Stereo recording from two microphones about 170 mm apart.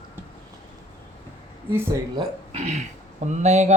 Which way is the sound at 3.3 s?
40° right (ahead or behind).